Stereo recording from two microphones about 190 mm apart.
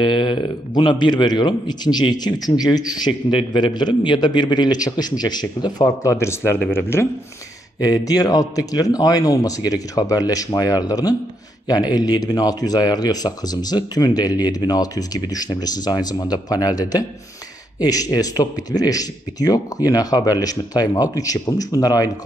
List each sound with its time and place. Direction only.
0.0 s speech: 25° left (ahead or behind)